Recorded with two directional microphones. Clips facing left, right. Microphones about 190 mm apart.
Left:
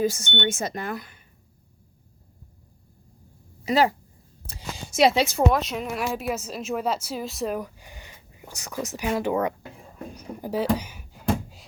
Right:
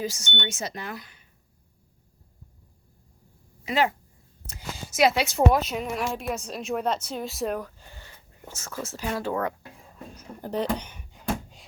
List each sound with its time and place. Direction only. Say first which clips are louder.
0.0 s speech: left 7 dB; 55° left (ahead or behind)
3.7 s speech: left 4 dB; 40° left (ahead or behind)
4.9 s speech: left 2 dB; 30° left (ahead or behind)
5.5 s speech: even; centre (ahead or behind)
7.6 s speech: left 3 dB; 15° left (ahead or behind)
10.2 s a sound: left 2 dB; 10° left (ahead or behind)